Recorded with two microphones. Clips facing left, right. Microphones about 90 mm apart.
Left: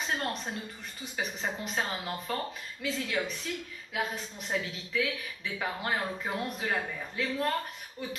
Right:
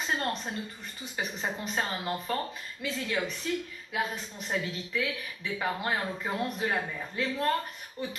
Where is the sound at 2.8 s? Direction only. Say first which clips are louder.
Even; centre (ahead or behind).